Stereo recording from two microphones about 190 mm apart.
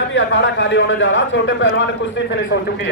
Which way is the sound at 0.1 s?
75° left (ahead or behind).